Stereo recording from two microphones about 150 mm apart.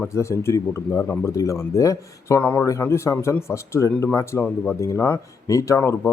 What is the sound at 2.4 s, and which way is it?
A man's voice, 10° left (ahead or behind).